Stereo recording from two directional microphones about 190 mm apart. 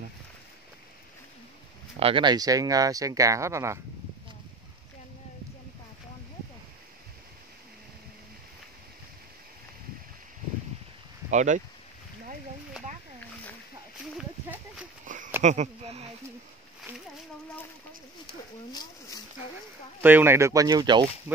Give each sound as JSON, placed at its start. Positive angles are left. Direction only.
{"t": 2.0, "sound": "speech", "side_deg": -30}
{"t": 11.2, "sound": "speech", "side_deg": -40}
{"t": 14.1, "sound": "a sound", "side_deg": -5}
{"t": 15.4, "sound": "speech", "side_deg": -40}
{"t": 18.7, "sound": "speech", "side_deg": 20}
{"t": 20.0, "sound": "speech", "side_deg": -10}